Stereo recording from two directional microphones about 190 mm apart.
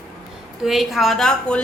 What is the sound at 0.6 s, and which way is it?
A woman's voice, centre (ahead or behind).